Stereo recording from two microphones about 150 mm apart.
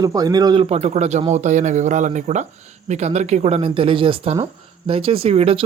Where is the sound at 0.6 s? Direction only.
45° right (ahead or behind).